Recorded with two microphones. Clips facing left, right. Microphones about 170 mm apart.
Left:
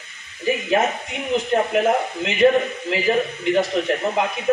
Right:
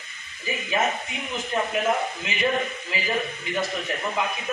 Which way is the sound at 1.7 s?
70° left (ahead or behind).